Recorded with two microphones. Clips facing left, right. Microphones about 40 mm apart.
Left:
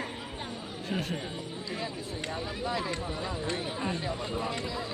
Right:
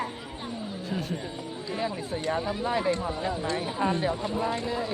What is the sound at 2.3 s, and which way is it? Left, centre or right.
Speech, right.